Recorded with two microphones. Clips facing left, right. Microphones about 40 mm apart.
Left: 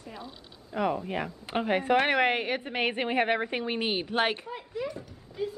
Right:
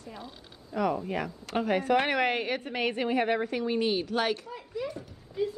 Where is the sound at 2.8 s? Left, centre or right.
Left.